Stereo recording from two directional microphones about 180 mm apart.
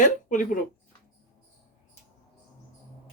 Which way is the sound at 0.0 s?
45° left (ahead or behind).